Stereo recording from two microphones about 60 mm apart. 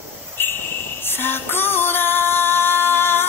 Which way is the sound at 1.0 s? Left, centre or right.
Left.